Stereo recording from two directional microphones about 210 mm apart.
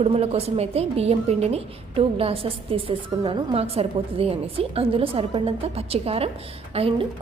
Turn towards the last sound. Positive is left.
turn(degrees=-25)  # may be behind; listen again after turning